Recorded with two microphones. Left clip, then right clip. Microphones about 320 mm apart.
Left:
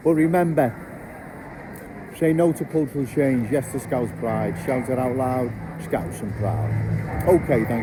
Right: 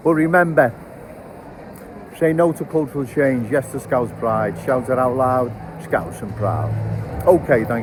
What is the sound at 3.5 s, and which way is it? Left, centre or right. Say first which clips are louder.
Speech: right 5 dB; right.